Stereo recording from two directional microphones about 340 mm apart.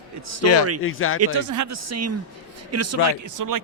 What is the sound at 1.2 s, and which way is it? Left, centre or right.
Speech, right.